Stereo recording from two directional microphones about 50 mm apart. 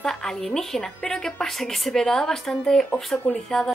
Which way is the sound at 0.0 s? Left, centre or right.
Centre.